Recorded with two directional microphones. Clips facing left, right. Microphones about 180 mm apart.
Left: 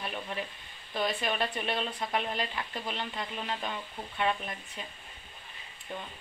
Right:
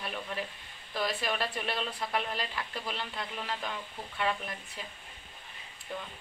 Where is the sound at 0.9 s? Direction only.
20° left (ahead or behind).